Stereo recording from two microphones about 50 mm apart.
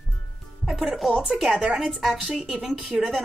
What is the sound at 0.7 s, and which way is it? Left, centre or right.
Speech, centre.